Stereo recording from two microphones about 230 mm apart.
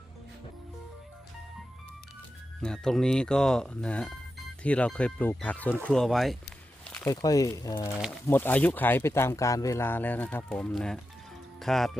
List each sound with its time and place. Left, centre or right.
2.6 s speech: centre